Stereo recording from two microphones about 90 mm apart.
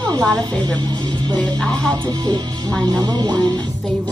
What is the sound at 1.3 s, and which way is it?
Speech, 50° right (ahead or behind).